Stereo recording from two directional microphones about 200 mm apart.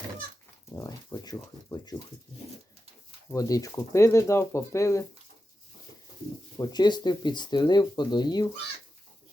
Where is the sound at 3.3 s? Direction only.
15° left (ahead or behind).